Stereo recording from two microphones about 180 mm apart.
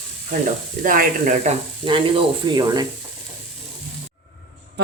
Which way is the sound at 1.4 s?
30° right (ahead or behind).